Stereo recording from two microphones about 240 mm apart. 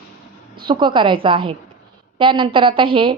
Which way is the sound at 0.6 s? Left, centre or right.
Centre.